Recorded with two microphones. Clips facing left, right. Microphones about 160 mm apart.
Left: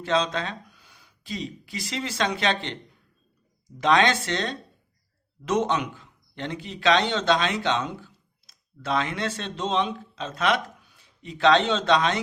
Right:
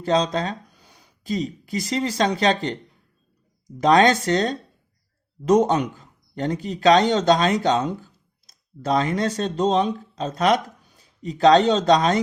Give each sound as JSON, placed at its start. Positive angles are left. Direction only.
{"t": 0.0, "sound": "speech", "side_deg": -40}
{"t": 3.8, "sound": "a man's voice", "side_deg": -40}